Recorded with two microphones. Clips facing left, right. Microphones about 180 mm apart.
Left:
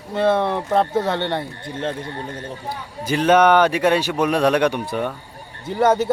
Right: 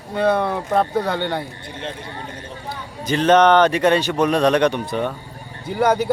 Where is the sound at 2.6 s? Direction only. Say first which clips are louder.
Right 1 dB; 10° left (ahead or behind).